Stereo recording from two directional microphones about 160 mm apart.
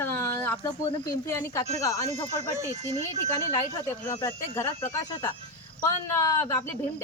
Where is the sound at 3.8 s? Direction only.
20° left (ahead or behind).